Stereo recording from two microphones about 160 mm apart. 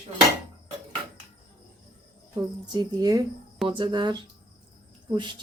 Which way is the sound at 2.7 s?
25° right (ahead or behind).